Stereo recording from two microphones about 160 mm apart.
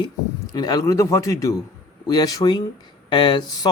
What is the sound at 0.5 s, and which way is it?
Speech, 25° left (ahead or behind).